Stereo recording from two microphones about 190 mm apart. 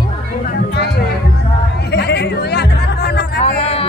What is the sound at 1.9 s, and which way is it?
Music, 60° left (ahead or behind).